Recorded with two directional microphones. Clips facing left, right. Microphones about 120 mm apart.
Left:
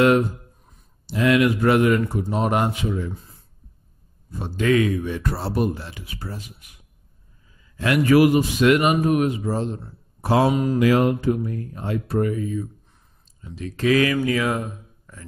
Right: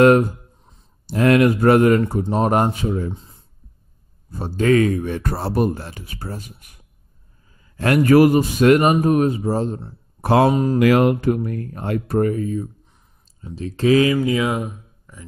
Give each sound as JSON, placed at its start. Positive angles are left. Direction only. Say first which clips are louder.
{"t": 1.0, "sound": "a man's voice", "louder": "right 3 dB", "side_deg": -45}
{"t": 3.1, "sound": "a sound", "louder": "right 4 dB", "side_deg": -25}
{"t": 4.3, "sound": "a man's voice", "louder": "right 3 dB", "side_deg": -40}
{"t": 10.2, "sound": "speech", "louder": "right 3 dB", "side_deg": -55}
{"t": 10.5, "sound": "a man's voice", "louder": "right 3 dB", "side_deg": -35}
{"t": 10.8, "sound": "speech", "louder": "right 3 dB", "side_deg": -60}
{"t": 13.6, "sound": "speech", "louder": "right 3 dB", "side_deg": -30}